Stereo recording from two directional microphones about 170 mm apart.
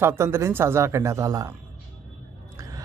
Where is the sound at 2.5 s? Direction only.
20° right (ahead or behind).